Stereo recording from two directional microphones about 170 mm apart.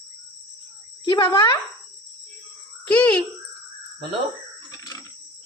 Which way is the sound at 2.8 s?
10° left (ahead or behind).